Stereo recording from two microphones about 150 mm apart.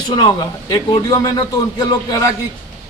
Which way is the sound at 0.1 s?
30° left (ahead or behind).